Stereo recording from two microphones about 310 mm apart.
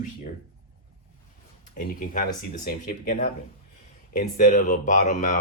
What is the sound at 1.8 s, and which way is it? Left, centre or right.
Speech, left.